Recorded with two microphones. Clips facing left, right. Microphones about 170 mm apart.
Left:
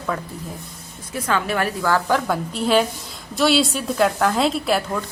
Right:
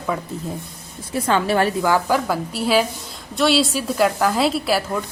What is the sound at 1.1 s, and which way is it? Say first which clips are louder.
Speech: right 4 dB; 30° right (ahead or behind).